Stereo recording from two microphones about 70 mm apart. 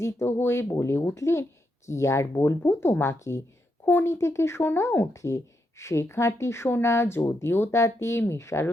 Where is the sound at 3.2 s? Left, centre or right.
Left.